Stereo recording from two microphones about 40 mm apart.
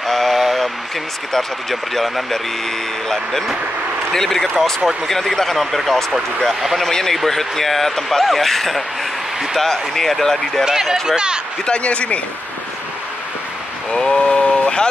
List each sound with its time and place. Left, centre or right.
0.0 s a sound: centre
1.3 s speech: centre
4.1 s speech: centre
6.6 s speech: centre
6.9 s speech: centre
10.6 s speech: centre
11.6 s a man's voice: left
13.9 s speech: centre